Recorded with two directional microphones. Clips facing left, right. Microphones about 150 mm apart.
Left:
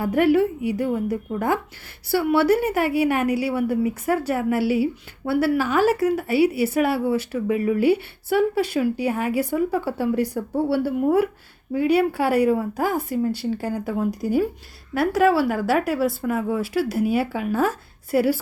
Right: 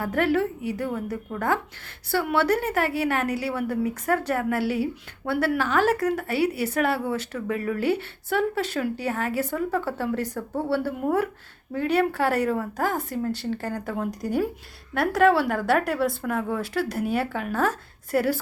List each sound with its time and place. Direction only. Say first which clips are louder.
0.0 s a woman's voice: left 5 dB; 10° left (ahead or behind)